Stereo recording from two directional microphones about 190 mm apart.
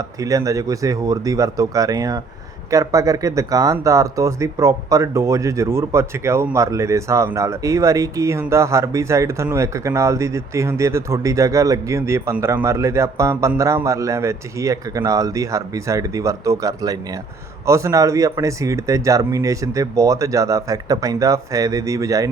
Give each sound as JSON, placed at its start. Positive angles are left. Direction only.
{"t": 0.2, "sound": "speech", "side_deg": -20}